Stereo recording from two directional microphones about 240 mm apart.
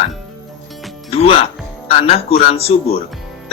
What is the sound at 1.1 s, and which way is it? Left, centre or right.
Speech, left.